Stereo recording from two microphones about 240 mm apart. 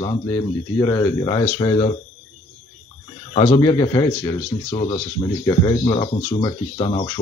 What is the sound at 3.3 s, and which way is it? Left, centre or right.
Speech, centre.